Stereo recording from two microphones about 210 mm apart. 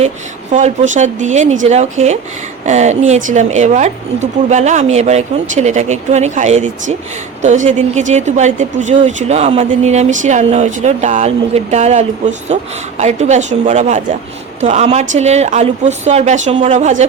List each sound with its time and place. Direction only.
0.5 s speech: 35° right (ahead or behind)